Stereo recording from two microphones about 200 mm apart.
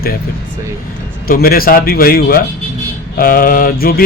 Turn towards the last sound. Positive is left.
turn(degrees=45)  # may be behind; listen again after turning